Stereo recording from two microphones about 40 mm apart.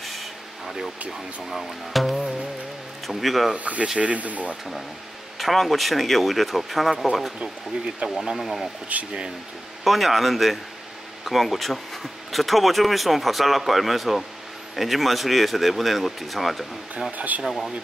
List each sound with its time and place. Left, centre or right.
0.0 s a sound: centre
1.5 s speech: centre
3.5 s speech: right
5.4 s speech: centre
8.0 s speech: right
8.4 s speech: centre
8.9 s speech: right
9.8 s speech: centre